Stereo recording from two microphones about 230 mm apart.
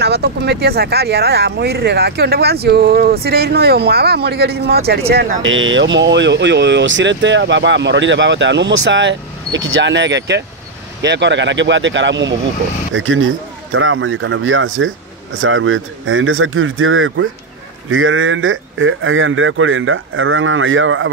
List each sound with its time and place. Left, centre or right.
0.0 s speech: right
5.4 s speech: right